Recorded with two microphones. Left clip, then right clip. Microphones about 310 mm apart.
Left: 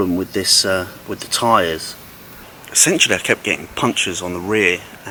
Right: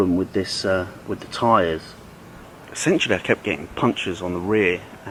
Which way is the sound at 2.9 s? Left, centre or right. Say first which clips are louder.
Left 2 dB; centre.